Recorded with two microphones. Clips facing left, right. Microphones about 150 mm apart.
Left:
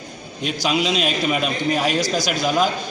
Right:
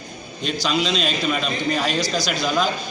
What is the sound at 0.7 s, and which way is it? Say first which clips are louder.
A man's voice: left 2 dB; 10° left (ahead or behind).